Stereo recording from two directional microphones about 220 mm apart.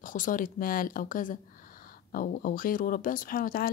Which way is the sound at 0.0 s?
35° left (ahead or behind).